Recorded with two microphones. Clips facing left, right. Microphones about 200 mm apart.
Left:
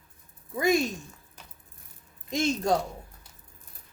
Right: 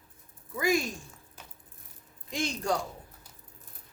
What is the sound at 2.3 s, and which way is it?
Speech, 20° left (ahead or behind).